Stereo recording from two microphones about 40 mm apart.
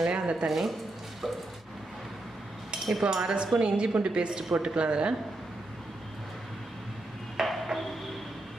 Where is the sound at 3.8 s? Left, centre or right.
Right.